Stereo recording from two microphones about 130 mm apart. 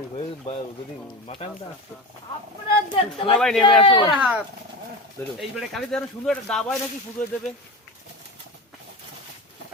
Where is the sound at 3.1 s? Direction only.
45° left (ahead or behind).